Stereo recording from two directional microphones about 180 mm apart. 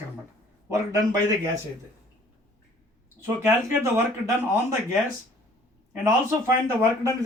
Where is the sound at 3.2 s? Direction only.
15° right (ahead or behind).